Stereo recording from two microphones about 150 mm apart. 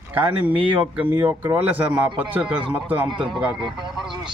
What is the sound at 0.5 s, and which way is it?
Speech, 35° right (ahead or behind).